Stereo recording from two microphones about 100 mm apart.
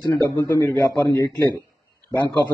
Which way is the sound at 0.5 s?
25° left (ahead or behind).